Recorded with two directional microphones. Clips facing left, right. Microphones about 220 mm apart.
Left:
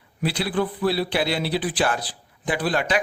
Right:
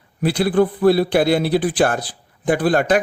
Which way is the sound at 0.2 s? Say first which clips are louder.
Right 8 dB; 50° right (ahead or behind).